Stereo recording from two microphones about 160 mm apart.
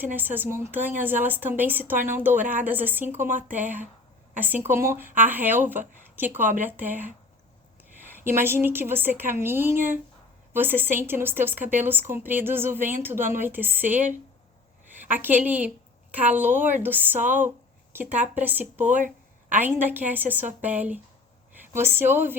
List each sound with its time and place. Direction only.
0.0 s speech: 10° right (ahead or behind)
14.8 s a sound: 10° right (ahead or behind)
15.4 s speech: 10° right (ahead or behind)
18.2 s speech: 10° right (ahead or behind)
18.9 s speech: 50° right (ahead or behind)
19.5 s speech: 10° right (ahead or behind)